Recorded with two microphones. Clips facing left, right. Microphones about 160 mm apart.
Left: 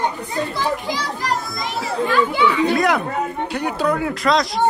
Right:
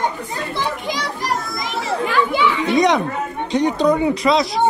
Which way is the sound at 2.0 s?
15° right (ahead or behind).